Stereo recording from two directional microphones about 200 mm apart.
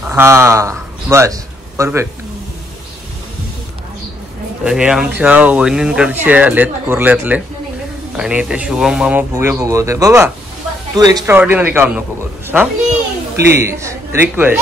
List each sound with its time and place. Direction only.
0.0 s a man's voice: 10° right (ahead or behind)
4.6 s speech: 5° right (ahead or behind); by 11.3 s 20° right (ahead or behind)
11.3 s speech: 10° right (ahead or behind)